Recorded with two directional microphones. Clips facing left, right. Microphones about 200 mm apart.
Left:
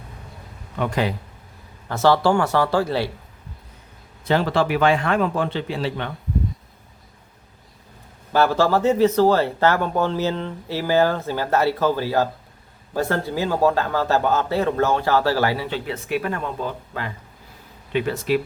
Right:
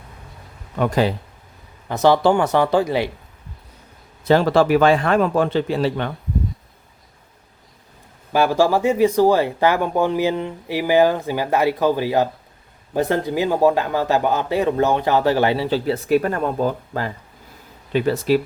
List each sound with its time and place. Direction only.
0.8 s a man's voice: 35° right (ahead or behind)
1.9 s speech: 15° right (ahead or behind)
4.3 s a man's voice: 40° right (ahead or behind)
8.3 s a man's voice: 15° right (ahead or behind); by 18.3 s 35° right (ahead or behind)